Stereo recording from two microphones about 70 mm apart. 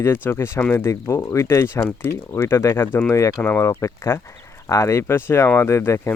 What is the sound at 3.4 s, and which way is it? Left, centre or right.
Speech, left.